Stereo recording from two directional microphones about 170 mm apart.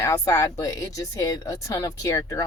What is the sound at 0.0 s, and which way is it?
Speech, 15° left (ahead or behind).